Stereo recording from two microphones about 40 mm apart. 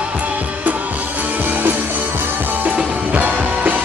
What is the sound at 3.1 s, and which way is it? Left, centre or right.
Music, right.